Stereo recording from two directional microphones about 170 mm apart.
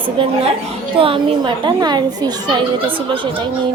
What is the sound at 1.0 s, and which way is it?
A woman's voice, 30° right (ahead or behind).